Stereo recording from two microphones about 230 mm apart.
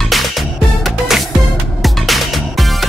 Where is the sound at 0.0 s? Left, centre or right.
Centre.